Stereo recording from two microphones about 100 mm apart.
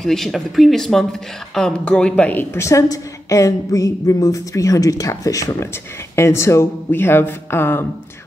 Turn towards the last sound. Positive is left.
turn(degrees=25)  # may be behind; listen again after turning